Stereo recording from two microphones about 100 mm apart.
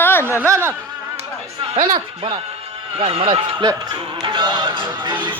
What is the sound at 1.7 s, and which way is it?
Speech, 65° right (ahead or behind).